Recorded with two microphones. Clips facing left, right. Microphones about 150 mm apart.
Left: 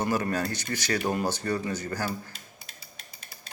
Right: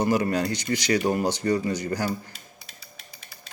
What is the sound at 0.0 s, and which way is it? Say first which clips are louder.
A man's voice: right 4 dB; 15° right (ahead or behind).